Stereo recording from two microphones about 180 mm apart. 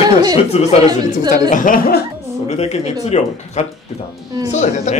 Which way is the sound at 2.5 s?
35° left (ahead or behind).